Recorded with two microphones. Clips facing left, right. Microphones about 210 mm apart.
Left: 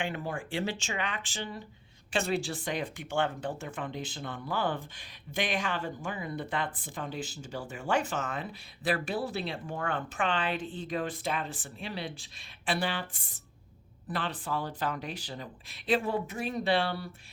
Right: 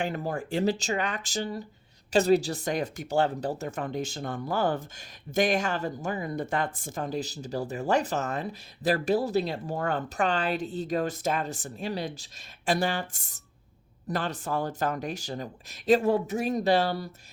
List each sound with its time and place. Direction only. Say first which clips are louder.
0.0 s speech: right 4 dB; 40° right (ahead or behind)